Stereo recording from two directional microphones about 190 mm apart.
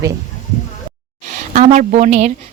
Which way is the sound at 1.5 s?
40° right (ahead or behind).